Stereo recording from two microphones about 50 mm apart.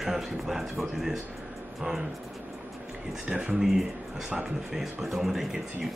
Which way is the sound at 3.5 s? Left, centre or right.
Centre.